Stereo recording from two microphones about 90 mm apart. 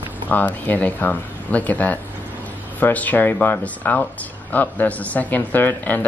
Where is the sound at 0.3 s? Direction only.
20° left (ahead or behind).